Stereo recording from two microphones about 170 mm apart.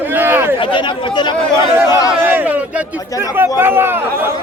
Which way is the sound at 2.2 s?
10° right (ahead or behind).